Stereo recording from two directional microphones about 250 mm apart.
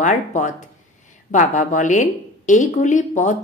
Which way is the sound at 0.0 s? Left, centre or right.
Left.